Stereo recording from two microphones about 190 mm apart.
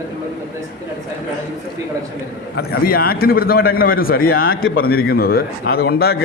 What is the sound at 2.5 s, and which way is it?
A man's voice, 50° left (ahead or behind).